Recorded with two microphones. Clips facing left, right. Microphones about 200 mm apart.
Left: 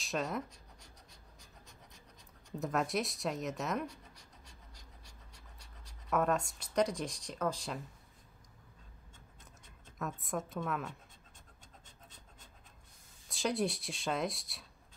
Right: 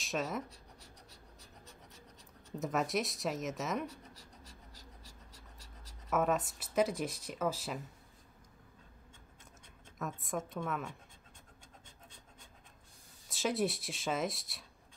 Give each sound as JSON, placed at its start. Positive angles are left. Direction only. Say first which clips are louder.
{"t": 0.0, "sound": "speech", "louder": "even", "side_deg": 0}
{"t": 0.5, "sound": "a sound", "louder": "right 3 dB", "side_deg": -35}
{"t": 2.6, "sound": "speech", "louder": "even", "side_deg": 0}
{"t": 3.9, "sound": "scratch", "louder": "right 3 dB", "side_deg": -40}
{"t": 5.0, "sound": "pant", "louder": "right 3 dB", "side_deg": -40}
{"t": 6.0, "sound": "speech", "louder": "even", "side_deg": -5}
{"t": 9.9, "sound": "speech", "louder": "even", "side_deg": 0}
{"t": 13.3, "sound": "speech", "louder": "even", "side_deg": 0}